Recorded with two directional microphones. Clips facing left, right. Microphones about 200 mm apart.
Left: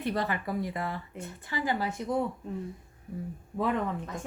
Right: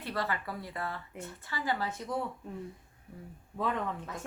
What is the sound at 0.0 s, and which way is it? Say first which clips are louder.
Speech: left 4 dB; 20° left (ahead or behind).